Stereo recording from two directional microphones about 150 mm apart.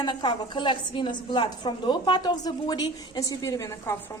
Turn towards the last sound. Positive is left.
turn(degrees=20)  # may be behind; listen again after turning